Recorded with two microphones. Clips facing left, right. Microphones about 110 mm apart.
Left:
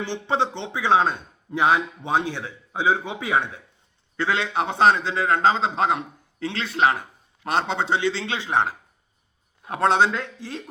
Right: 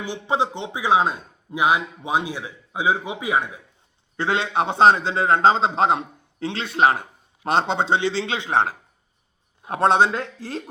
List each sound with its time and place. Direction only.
0.0 s speech: 15° right (ahead or behind)
4.2 s a man's voice: 25° right (ahead or behind)
9.6 s a man's voice: 25° right (ahead or behind)
10.2 s speech: 40° right (ahead or behind)